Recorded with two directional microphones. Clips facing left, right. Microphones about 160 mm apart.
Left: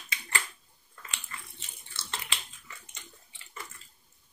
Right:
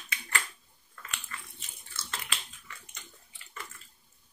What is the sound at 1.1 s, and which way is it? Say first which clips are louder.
Biting: right 1 dB; 25° left (ahead or behind).